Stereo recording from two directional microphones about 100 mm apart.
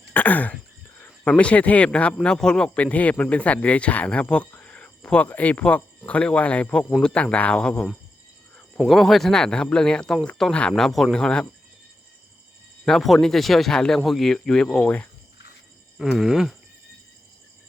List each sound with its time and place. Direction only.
0.1 s a sound: 15° left (ahead or behind)
1.0 s speech: 15° left (ahead or behind)
12.8 s speech: 5° left (ahead or behind)
16.0 s speech: 5° right (ahead or behind)